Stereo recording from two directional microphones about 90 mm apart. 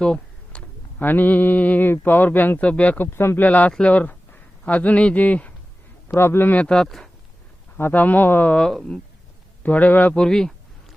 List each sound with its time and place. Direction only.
0.0 s speech: 10° left (ahead or behind)
7.8 s speech: 20° left (ahead or behind); by 9.0 s 5° left (ahead or behind)
9.6 s speech: 20° left (ahead or behind)
10.2 s a sound: 5° left (ahead or behind)